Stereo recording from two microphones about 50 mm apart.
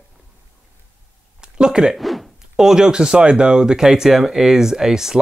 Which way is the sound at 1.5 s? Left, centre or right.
Centre.